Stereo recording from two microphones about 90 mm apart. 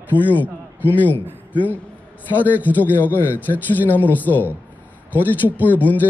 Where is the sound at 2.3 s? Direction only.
20° left (ahead or behind).